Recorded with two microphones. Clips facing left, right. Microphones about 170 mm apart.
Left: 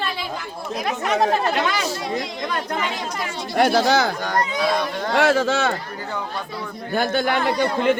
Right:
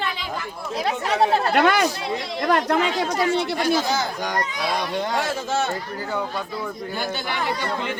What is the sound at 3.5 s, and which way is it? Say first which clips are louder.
Speech: left 5 dB; 65° left (ahead or behind).